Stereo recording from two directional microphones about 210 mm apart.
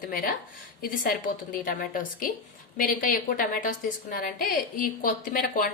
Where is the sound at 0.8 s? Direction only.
45° left (ahead or behind).